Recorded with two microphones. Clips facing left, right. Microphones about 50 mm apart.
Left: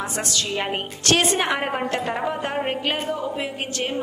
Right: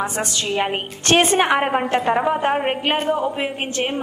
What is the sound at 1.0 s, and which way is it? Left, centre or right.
A woman's voice, right.